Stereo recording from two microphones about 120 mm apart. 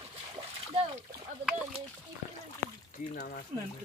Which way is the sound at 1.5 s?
10° right (ahead or behind).